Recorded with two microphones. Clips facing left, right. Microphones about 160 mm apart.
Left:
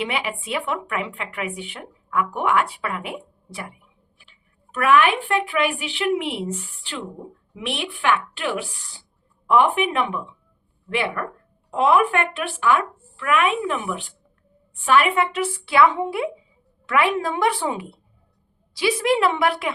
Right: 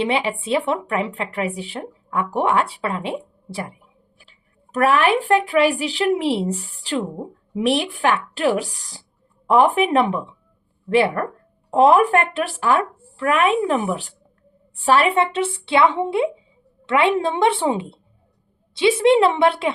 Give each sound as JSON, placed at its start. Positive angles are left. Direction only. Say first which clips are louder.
{"t": 0.0, "sound": "speech", "louder": "right 5 dB", "side_deg": -30}